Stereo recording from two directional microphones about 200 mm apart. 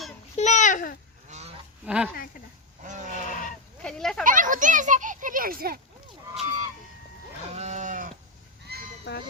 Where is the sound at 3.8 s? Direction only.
5° left (ahead or behind).